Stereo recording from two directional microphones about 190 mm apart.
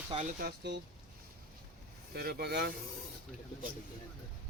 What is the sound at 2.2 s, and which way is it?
Speech, 55° right (ahead or behind).